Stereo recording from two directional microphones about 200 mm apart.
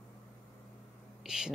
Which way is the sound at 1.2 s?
5° right (ahead or behind).